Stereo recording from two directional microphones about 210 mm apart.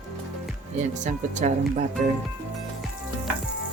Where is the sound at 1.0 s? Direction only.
35° right (ahead or behind).